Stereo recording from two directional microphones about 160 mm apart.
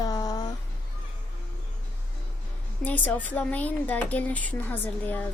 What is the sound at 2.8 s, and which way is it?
Speech, 10° left (ahead or behind).